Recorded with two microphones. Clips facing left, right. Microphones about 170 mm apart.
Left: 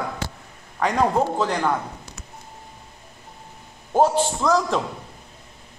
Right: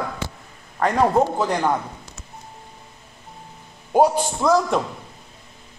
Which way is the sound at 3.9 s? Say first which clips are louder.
Right 1 dB; 10° right (ahead or behind).